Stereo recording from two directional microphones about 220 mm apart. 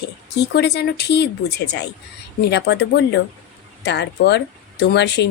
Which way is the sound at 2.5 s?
50° left (ahead or behind).